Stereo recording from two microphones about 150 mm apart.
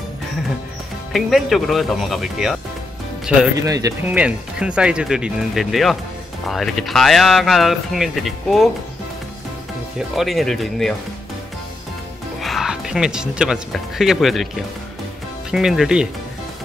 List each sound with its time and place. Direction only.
1.1 s speech: centre (ahead or behind)
3.6 s speech: 20° right (ahead or behind)
4.1 s speech: 10° right (ahead or behind)
9.9 s speech: centre (ahead or behind)
12.4 s speech: centre (ahead or behind)
15.5 s speech: centre (ahead or behind)